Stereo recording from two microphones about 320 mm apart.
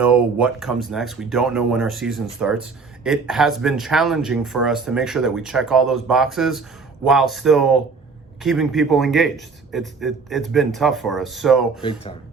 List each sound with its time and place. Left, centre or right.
0.0 s speech: centre
11.8 s speech: centre